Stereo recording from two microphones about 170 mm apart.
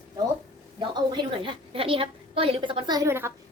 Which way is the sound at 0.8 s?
25° right (ahead or behind).